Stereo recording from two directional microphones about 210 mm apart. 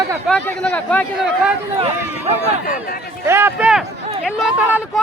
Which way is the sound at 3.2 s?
10° right (ahead or behind).